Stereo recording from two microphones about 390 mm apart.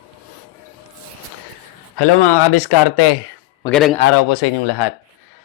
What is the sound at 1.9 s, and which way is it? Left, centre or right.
Speech, left.